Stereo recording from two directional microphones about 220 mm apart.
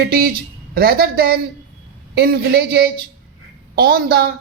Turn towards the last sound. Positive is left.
turn(degrees=-45)  # may be behind; listen again after turning